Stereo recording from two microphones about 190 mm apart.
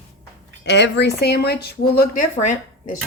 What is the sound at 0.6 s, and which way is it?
A woman's voice, 65° left (ahead or behind).